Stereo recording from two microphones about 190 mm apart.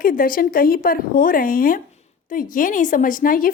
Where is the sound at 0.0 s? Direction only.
50° left (ahead or behind).